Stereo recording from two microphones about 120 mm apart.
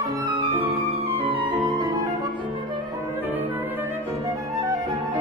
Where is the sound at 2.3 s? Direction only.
40° right (ahead or behind); by 4.5 s 25° right (ahead or behind).